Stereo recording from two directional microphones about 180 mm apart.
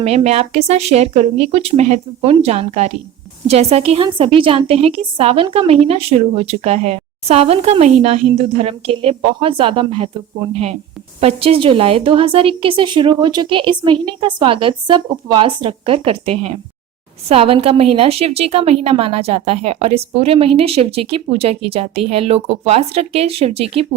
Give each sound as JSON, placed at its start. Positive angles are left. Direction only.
{"t": 0.0, "sound": "a woman's voice", "side_deg": -35}